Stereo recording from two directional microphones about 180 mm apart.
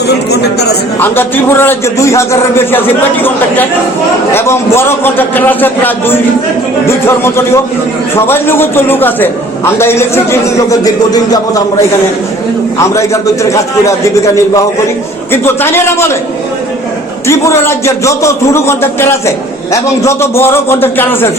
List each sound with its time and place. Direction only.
0.3 s speech: 65° left (ahead or behind)
0.9 s a man's voice: 10° left (ahead or behind)
12.8 s a man's voice: 15° left (ahead or behind)
15.3 s a man's voice: 15° left (ahead or behind)
17.2 s a man's voice: 15° left (ahead or behind)